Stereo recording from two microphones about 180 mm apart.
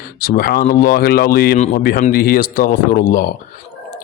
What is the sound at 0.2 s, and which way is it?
A man's voice, 55° left (ahead or behind).